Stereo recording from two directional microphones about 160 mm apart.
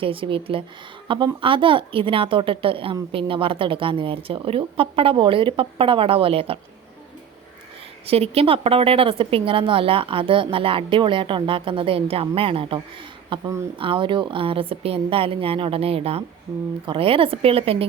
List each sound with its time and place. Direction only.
0.0 s a woman's voice: 35° right (ahead or behind)
8.0 s a woman's voice: 40° right (ahead or behind)
13.3 s a woman's voice: 20° right (ahead or behind)